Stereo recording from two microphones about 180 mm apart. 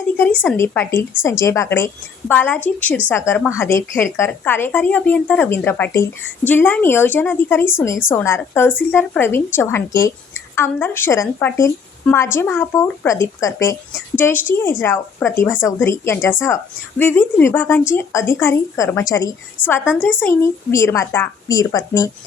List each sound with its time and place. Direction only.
0.5 s a woman's voice: 15° left (ahead or behind)
19.6 s a woman's voice: 10° right (ahead or behind)
20.0 s a woman's voice: 10° left (ahead or behind)